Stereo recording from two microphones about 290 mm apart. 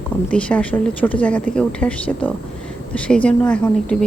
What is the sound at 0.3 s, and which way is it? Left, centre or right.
A woman's voice, centre.